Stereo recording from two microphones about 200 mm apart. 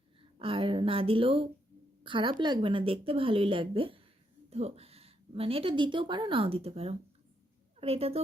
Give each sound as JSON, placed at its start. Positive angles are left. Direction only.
{"t": 0.2, "sound": "a woman's voice", "side_deg": -25}